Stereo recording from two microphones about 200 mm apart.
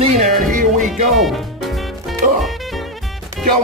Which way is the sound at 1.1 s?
Centre (ahead or behind).